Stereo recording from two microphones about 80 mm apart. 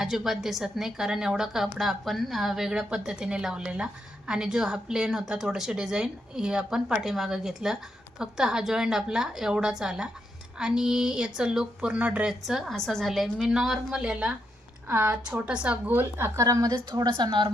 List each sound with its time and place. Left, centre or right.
0.0 s a woman's voice: centre
12.3 s a woman's voice: centre
14.8 s a woman's voice: right
15.9 s speech: right
16.7 s a woman's voice: right